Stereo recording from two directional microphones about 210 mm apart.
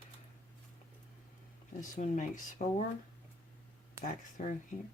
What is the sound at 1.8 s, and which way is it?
Speech, 35° left (ahead or behind).